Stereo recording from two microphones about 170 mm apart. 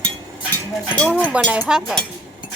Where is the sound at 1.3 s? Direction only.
5° right (ahead or behind).